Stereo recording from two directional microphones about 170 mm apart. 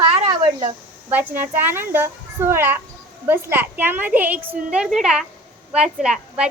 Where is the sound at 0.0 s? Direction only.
30° right (ahead or behind).